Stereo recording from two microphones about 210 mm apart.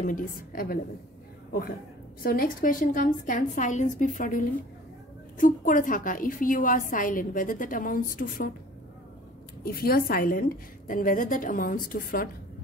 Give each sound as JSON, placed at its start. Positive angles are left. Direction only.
{"t": 0.0, "sound": "a woman's voice", "side_deg": 40}
{"t": 2.2, "sound": "a woman's voice", "side_deg": 40}
{"t": 9.7, "sound": "a woman's voice", "side_deg": 45}